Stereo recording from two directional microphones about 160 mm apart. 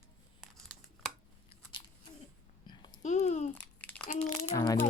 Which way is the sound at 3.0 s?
50° left (ahead or behind).